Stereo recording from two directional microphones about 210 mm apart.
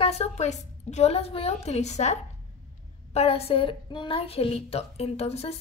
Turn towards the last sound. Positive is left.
turn(degrees=30)  # may be behind; listen again after turning